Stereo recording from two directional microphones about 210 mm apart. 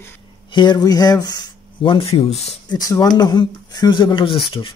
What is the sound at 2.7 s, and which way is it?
Speech, 15° left (ahead or behind).